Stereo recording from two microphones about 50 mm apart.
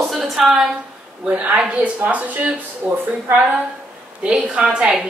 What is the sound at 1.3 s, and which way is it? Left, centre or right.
Speech, right.